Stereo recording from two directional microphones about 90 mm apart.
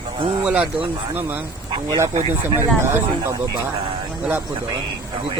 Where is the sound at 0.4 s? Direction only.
15° right (ahead or behind).